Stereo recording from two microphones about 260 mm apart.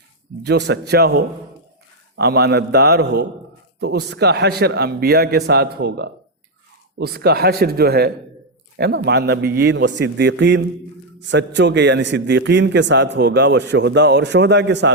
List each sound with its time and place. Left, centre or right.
0.4 s a man's voice: right